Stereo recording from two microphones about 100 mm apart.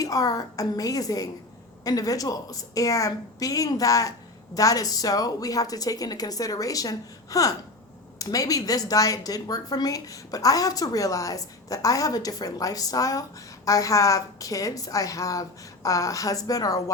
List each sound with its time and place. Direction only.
0.0 s a woman's voice: 35° left (ahead or behind)